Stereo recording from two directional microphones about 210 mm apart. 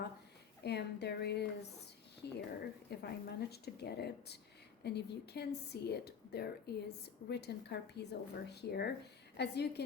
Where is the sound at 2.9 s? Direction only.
50° left (ahead or behind).